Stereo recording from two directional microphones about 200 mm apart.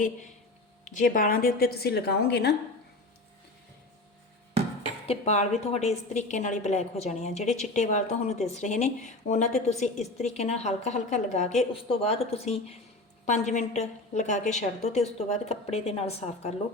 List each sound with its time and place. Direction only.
0.9 s a woman's voice: 40° left (ahead or behind)
5.0 s a woman's voice: 30° left (ahead or behind)